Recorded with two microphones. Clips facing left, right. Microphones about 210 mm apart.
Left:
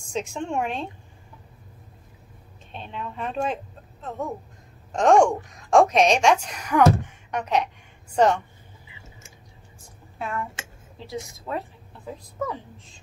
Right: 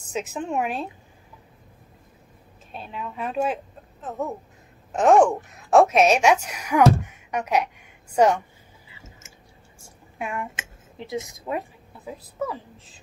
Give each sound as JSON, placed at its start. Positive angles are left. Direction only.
{"t": 0.1, "sound": "a woman's voice", "side_deg": -5}
{"t": 2.7, "sound": "a woman's voice", "side_deg": -5}
{"t": 10.1, "sound": "speech", "side_deg": -15}
{"t": 12.1, "sound": "a woman's voice", "side_deg": -5}